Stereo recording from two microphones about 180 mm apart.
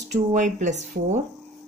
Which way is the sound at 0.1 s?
45° right (ahead or behind).